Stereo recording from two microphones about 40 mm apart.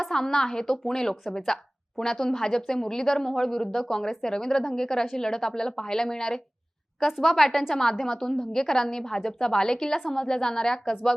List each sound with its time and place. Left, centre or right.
0.0 s speech: centre